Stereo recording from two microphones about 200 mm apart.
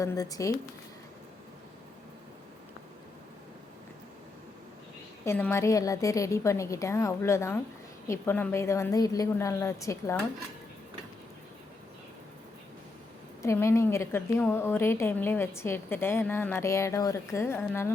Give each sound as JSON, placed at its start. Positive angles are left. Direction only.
{"t": 0.0, "sound": "a woman's voice", "side_deg": 15}
{"t": 5.2, "sound": "a woman's voice", "side_deg": 10}
{"t": 13.4, "sound": "a woman's voice", "side_deg": 15}